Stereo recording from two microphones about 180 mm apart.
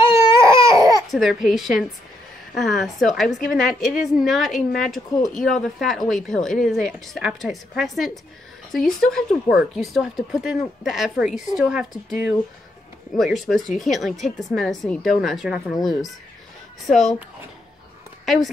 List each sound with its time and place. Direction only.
0.0 s baby cry: 15° right (ahead or behind)
1.1 s speech: centre (ahead or behind)
18.2 s speech: centre (ahead or behind)